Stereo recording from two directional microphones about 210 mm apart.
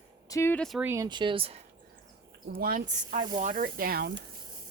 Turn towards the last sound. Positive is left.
turn(degrees=-50)  # may be behind; listen again after turning